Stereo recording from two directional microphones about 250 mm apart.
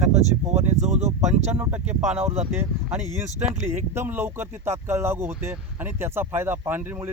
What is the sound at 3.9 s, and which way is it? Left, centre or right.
Speech, centre.